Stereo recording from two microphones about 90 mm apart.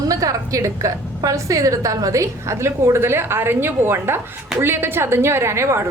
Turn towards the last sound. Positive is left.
turn(degrees=-30)  # may be behind; listen again after turning